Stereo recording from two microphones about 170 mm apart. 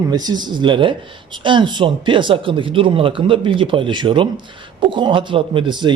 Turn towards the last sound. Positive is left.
turn(degrees=-30)  # may be behind; listen again after turning